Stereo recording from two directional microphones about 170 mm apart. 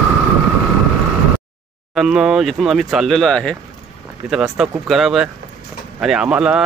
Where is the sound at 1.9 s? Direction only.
5° right (ahead or behind).